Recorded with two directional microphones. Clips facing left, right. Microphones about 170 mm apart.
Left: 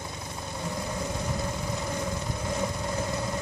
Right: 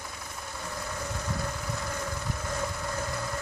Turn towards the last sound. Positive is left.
turn(degrees=20)  # may be behind; listen again after turning